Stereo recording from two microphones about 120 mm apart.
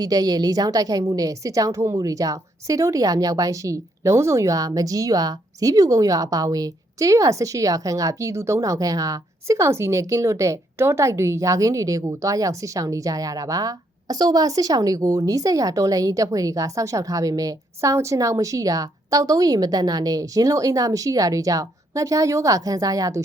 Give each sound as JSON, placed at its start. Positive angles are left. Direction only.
{"t": 0.0, "sound": "a woman's voice", "side_deg": -30}